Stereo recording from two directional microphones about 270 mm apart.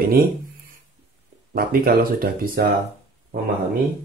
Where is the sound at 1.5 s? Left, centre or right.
Right.